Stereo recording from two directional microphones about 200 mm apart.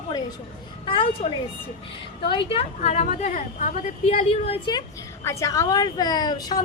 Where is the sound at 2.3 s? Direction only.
25° left (ahead or behind).